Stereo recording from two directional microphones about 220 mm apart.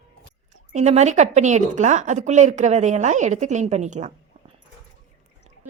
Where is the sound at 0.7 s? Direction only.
30° right (ahead or behind).